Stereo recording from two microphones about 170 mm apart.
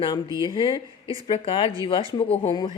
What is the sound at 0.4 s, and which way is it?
Speech, 30° left (ahead or behind).